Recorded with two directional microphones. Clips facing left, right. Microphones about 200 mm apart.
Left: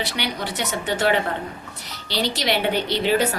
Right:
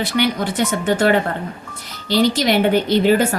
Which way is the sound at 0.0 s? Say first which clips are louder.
Right 8 dB; 50° right (ahead or behind).